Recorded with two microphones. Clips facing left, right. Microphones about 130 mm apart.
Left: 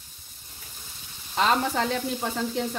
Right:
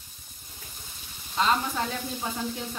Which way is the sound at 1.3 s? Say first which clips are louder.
Left 2 dB; 75° left (ahead or behind).